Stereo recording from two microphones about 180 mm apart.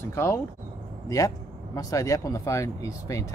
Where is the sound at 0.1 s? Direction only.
15° left (ahead or behind).